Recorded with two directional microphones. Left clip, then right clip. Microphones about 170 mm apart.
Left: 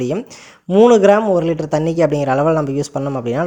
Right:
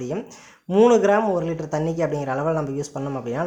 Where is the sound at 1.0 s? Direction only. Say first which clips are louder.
Left 7 dB; 30° left (ahead or behind).